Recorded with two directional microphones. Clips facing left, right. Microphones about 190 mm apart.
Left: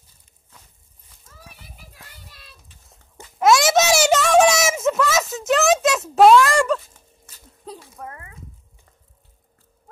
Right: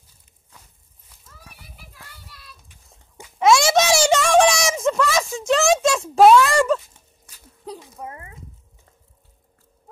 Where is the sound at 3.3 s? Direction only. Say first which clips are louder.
Even; centre (ahead or behind).